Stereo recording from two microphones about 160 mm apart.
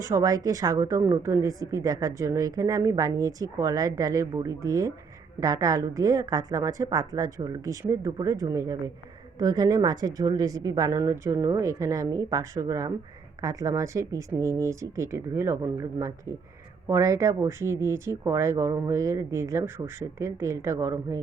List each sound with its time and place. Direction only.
0.0 s a woman's voice: 20° right (ahead or behind)